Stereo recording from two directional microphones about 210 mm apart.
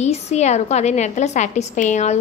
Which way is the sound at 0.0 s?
30° left (ahead or behind).